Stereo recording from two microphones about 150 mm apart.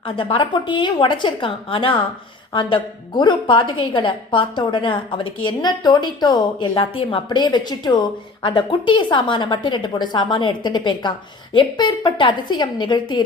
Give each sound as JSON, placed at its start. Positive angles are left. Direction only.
{"t": 0.2, "sound": "a woman's voice", "side_deg": 35}